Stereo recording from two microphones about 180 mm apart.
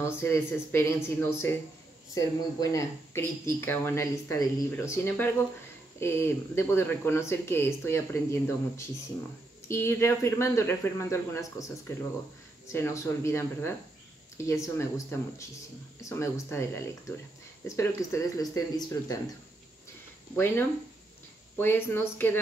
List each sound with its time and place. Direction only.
0.0 s speech: 15° left (ahead or behind)
12.6 s speech: 15° left (ahead or behind)
20.3 s speech: 10° left (ahead or behind)